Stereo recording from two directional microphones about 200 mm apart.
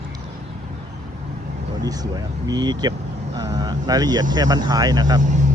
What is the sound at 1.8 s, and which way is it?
Speech, 20° right (ahead or behind).